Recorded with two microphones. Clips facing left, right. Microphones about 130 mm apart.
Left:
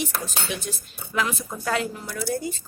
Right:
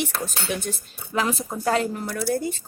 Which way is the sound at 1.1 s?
35° right (ahead or behind).